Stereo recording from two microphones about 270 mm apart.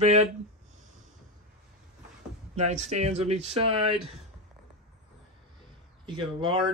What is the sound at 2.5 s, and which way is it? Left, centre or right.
Speech, right.